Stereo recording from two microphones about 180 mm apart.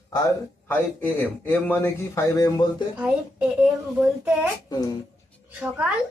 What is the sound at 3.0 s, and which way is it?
Speech, 5° right (ahead or behind).